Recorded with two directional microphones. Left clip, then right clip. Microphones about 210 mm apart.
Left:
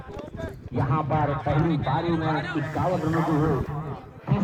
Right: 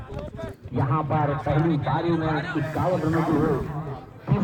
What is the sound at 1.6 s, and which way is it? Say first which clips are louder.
Speech: right 1 dB; 40° right (ahead or behind).